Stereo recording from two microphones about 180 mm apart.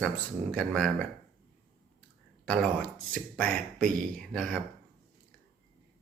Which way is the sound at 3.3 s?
5° left (ahead or behind).